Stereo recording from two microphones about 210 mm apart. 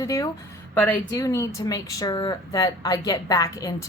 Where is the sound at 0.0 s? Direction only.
15° left (ahead or behind).